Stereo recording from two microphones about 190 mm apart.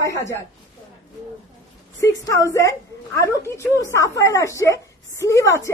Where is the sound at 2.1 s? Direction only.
15° left (ahead or behind).